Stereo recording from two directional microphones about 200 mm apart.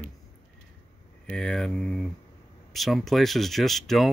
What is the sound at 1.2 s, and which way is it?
Speech, 5° left (ahead or behind).